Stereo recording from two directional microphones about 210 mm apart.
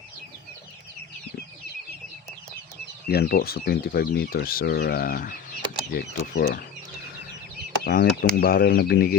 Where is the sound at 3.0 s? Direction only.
50° left (ahead or behind).